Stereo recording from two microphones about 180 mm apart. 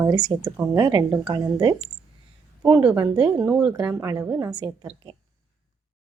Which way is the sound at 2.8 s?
5° right (ahead or behind).